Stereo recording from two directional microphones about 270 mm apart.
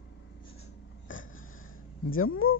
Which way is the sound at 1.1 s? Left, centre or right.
Left.